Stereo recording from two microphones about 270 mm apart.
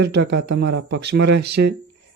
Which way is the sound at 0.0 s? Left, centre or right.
Right.